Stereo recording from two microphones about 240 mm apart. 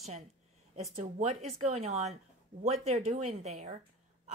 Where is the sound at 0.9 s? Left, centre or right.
Right.